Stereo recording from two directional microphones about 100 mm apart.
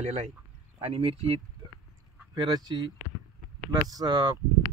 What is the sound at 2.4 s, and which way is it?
Speech, 45° right (ahead or behind).